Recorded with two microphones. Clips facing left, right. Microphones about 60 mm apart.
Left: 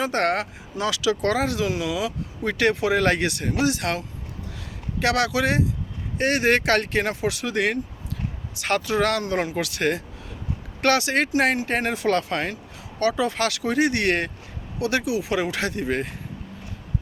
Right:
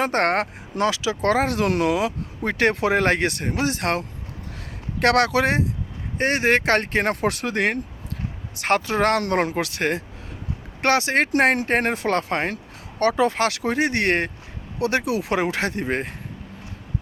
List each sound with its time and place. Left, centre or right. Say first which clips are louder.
0.0 s speech: right 2 dB; right
0.9 s speech: even; right
9.2 s speech: right 3 dB; right
9.6 s speech: even; right
11.3 s speech: right 3 dB; right